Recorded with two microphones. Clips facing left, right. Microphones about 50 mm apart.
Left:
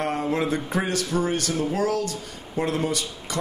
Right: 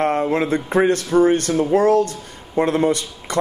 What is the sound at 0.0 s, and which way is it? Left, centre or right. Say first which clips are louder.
A man's voice: right 6 dB; right.